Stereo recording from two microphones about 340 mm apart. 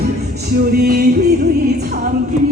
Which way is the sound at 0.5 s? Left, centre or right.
Right.